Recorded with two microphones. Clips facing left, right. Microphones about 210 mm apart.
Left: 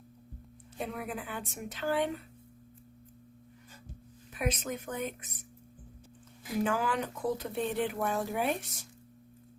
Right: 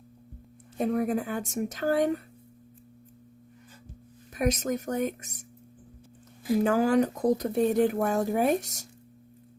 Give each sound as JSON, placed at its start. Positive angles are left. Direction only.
{"t": 0.8, "sound": "speech", "side_deg": -45}
{"t": 4.4, "sound": "speech", "side_deg": -45}
{"t": 6.7, "sound": "speech", "side_deg": -40}